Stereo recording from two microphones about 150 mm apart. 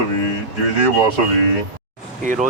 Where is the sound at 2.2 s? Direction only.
60° right (ahead or behind).